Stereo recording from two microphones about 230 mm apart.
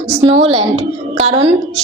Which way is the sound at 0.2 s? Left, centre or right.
Right.